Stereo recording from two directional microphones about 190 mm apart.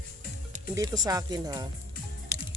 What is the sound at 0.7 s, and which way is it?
Speech, 20° right (ahead or behind).